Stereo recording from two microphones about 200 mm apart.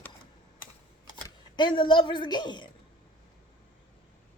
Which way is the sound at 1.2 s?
25° left (ahead or behind).